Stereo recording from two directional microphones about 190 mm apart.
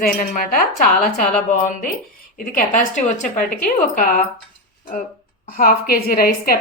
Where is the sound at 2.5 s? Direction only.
40° left (ahead or behind).